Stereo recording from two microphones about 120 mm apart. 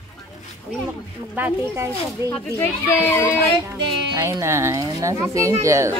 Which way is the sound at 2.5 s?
20° left (ahead or behind).